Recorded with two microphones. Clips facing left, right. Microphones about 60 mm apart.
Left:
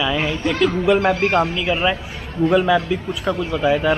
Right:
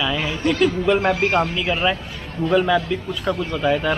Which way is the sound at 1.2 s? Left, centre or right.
Centre.